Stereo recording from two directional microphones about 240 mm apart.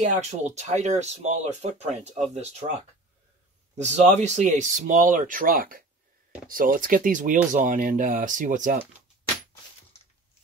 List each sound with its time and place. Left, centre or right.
0.0 s speech: right
3.7 s speech: right